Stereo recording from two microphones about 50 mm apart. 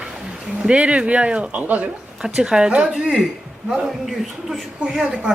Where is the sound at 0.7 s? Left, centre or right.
Right.